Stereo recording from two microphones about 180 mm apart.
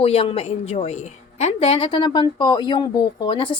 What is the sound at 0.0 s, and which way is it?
A woman's voice, 35° left (ahead or behind).